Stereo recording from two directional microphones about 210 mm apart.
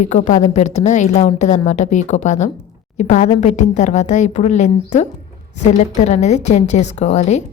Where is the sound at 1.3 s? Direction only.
25° left (ahead or behind).